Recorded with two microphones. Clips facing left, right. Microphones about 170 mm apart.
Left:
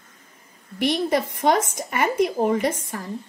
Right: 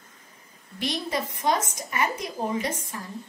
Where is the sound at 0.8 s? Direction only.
60° left (ahead or behind).